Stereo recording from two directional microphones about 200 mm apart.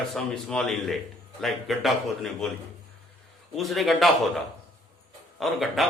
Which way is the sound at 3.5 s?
Centre (ahead or behind).